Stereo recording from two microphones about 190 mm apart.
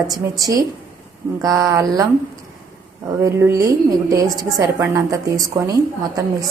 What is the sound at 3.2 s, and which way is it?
A woman's voice, 15° right (ahead or behind).